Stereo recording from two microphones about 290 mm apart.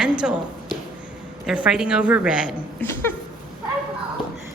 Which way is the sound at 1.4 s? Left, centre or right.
Centre.